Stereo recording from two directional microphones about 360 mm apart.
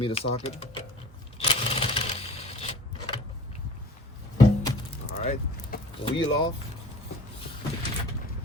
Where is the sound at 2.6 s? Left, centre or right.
Centre.